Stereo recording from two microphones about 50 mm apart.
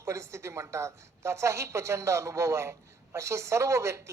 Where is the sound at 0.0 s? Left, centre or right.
Right.